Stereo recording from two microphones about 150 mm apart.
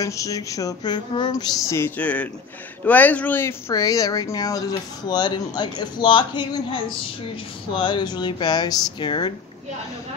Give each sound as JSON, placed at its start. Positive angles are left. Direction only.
{"t": 0.0, "sound": "speech", "side_deg": 20}